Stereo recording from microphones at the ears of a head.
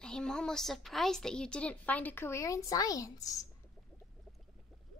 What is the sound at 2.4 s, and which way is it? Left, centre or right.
A woman's voice, left.